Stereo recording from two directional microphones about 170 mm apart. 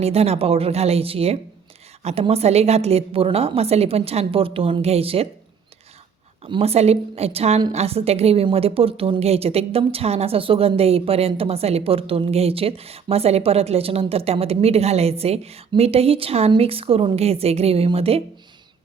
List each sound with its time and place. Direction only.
0.0 s a woman's voice: 35° right (ahead or behind)
6.4 s a woman's voice: 35° right (ahead or behind)